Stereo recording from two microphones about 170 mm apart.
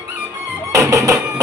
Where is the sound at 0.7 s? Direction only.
20° right (ahead or behind).